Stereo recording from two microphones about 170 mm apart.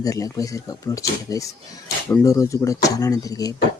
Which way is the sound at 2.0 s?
15° left (ahead or behind).